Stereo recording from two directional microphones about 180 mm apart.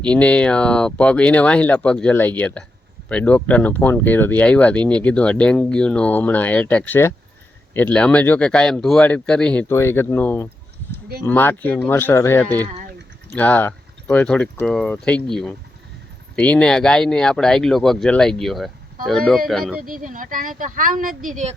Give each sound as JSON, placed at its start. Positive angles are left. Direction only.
{"t": 0.0, "sound": "speech", "side_deg": 5}
{"t": 19.8, "sound": "speech", "side_deg": -50}